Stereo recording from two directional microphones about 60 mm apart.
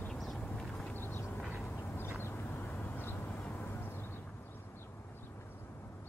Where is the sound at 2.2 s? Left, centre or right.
Left.